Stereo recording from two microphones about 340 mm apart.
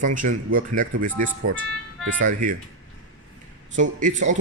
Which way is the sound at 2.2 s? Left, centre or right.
Right.